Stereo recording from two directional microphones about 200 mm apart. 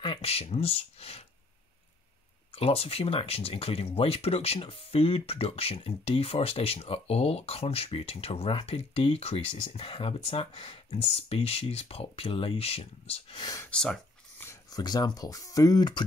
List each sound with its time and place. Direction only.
0.0 s speech: 25° left (ahead or behind)
2.5 s speech: 30° left (ahead or behind)
13.7 s a sound: 5° left (ahead or behind)
14.5 s speech: 20° left (ahead or behind)